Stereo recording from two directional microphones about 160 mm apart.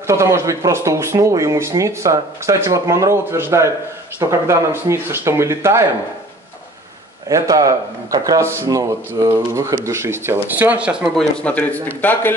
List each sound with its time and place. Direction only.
0.0 s speech: 15° right (ahead or behind)
7.2 s speech: 20° right (ahead or behind); by 11.2 s 5° right (ahead or behind)
11.3 s a man's voice: 10° left (ahead or behind)